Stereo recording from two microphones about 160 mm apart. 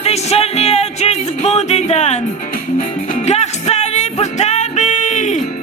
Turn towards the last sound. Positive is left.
turn(degrees=50)  # may be behind; listen again after turning